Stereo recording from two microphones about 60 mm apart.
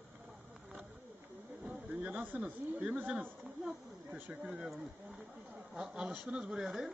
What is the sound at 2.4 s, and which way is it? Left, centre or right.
Speech, right.